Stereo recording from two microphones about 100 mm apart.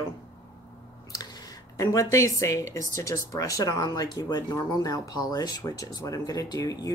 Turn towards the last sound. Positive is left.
turn(degrees=40)  # may be behind; listen again after turning